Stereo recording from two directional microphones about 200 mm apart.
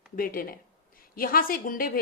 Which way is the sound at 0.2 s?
45° left (ahead or behind).